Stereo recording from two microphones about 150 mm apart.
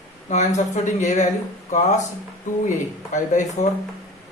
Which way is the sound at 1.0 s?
50° left (ahead or behind).